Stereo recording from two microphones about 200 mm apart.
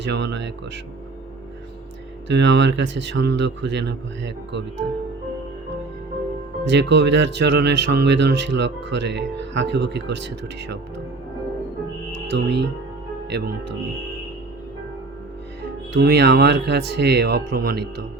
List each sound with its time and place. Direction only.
0.0 s speech: 60° right (ahead or behind)
2.2 s speech: 60° right (ahead or behind)
6.7 s speech: 60° right (ahead or behind)
12.1 s music: 60° right (ahead or behind)
13.3 s speech: 55° right (ahead or behind)
15.9 s speech: 55° right (ahead or behind)